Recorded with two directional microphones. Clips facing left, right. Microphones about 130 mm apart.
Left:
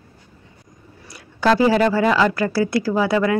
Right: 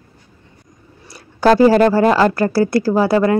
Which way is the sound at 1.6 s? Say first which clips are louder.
Right 6 dB; 40° right (ahead or behind).